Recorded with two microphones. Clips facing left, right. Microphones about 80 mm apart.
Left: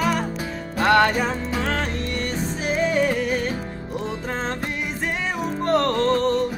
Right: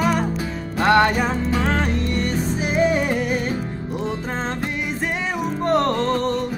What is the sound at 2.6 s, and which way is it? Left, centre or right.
Music, centre.